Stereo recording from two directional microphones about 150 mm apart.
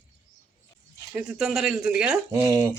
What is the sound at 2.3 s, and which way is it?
Speech, 20° right (ahead or behind).